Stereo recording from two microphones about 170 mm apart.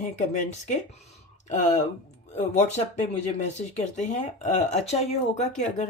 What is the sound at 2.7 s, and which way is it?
Speech, 40° left (ahead or behind).